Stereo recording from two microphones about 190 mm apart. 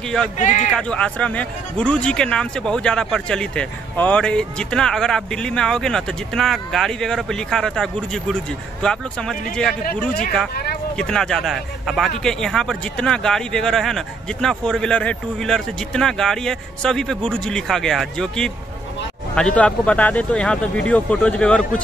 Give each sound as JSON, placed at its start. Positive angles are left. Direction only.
{"t": 0.4, "sound": "speech", "side_deg": 40}
{"t": 0.7, "sound": "speech", "side_deg": 5}
{"t": 10.5, "sound": "a sound", "side_deg": 55}
{"t": 11.0, "sound": "speech", "side_deg": 5}